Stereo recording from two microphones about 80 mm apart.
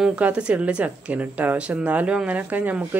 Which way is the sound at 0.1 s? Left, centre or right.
Centre.